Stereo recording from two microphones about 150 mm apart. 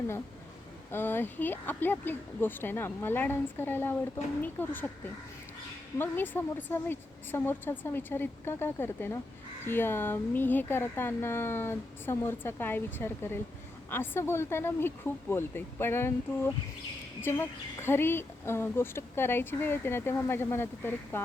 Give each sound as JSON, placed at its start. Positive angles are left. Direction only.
{"t": 0.9, "sound": "a woman's voice", "side_deg": 15}